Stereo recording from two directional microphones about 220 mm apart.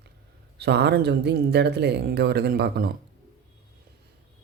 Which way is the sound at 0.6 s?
50° right (ahead or behind).